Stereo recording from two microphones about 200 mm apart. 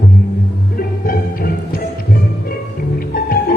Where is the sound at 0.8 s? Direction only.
45° left (ahead or behind).